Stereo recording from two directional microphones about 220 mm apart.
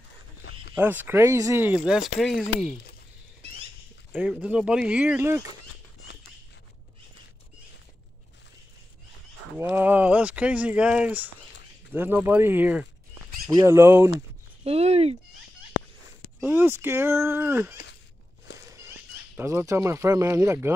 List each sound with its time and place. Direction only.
0.4 s a sound: 50° left (ahead or behind)
0.7 s speech: 10° right (ahead or behind)
4.1 s speech: 5° right (ahead or behind)
9.6 s speech: 10° right (ahead or behind)
14.6 s speech: 30° right (ahead or behind)
16.3 s speech: 10° right (ahead or behind)
18.8 s speech: 10° right (ahead or behind)